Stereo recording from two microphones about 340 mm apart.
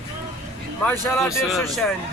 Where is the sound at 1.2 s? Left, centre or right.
Centre.